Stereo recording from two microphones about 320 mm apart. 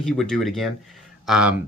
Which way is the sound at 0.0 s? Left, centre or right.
Centre.